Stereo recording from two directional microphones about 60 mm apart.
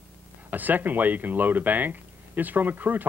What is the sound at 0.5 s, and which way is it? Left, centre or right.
Speech, right.